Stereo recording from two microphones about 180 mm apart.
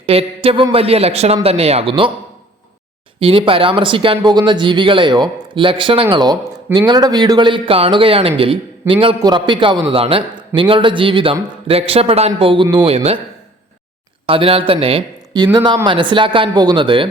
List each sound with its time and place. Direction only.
0.0 s a man's voice: 30° right (ahead or behind)
3.2 s a man's voice: 30° right (ahead or behind)
14.3 s speech: 30° right (ahead or behind)